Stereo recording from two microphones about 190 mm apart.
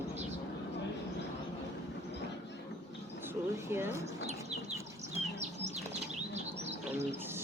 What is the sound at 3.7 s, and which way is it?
Speech, 10° right (ahead or behind).